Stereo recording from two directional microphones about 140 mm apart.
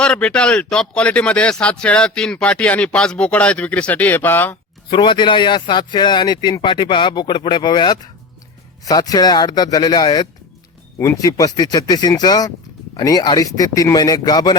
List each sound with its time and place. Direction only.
0.0 s speech: 5° left (ahead or behind)
4.9 s speech: 35° left (ahead or behind)
10.9 s speech: 20° left (ahead or behind)